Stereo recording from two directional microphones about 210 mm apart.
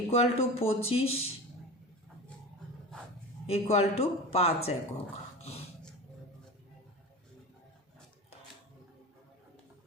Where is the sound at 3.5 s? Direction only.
30° left (ahead or behind).